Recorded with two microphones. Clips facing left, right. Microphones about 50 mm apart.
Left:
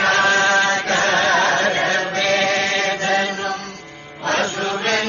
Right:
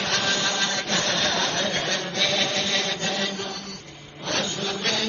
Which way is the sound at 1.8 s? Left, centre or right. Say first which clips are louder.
Left 7 dB; left.